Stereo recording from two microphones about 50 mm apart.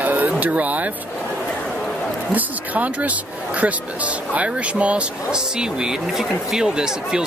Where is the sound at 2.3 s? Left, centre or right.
Right.